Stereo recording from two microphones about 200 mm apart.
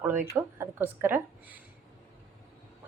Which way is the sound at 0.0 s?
10° right (ahead or behind).